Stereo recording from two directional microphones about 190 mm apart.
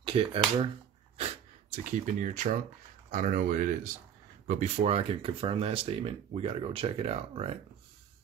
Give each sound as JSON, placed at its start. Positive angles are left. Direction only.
{"t": 0.0, "sound": "speech", "side_deg": -30}
{"t": 1.1, "sound": "sniff", "side_deg": -35}
{"t": 3.1, "sound": "speech", "side_deg": -45}